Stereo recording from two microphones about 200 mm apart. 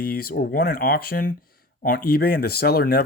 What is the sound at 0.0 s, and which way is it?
Speech, 50° left (ahead or behind).